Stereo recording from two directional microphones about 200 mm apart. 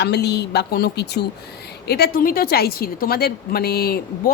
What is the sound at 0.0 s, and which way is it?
A woman's voice, 55° left (ahead or behind).